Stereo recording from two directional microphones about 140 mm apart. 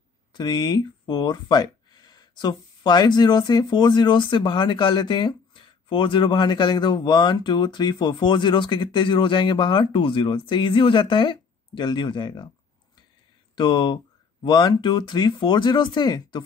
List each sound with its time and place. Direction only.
0.3 s speech: 30° left (ahead or behind)
13.6 s speech: 35° left (ahead or behind)